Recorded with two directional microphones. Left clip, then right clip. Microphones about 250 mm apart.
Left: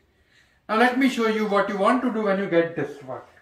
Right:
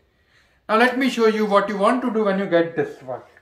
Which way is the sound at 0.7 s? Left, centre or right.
Centre.